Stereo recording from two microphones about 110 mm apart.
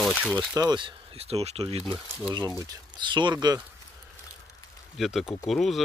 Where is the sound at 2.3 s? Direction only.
35° right (ahead or behind).